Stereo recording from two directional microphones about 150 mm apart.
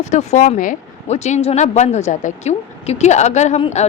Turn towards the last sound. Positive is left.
turn(degrees=45)  # may be behind; listen again after turning